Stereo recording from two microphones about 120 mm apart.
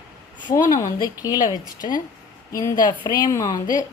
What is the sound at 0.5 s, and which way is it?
A woman's voice, 25° left (ahead or behind).